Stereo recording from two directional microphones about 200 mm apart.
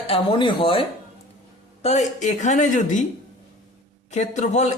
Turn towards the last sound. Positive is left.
turn(degrees=35)  # may be behind; listen again after turning